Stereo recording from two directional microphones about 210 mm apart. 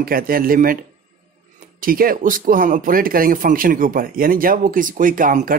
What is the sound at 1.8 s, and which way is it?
Speech, 40° right (ahead or behind).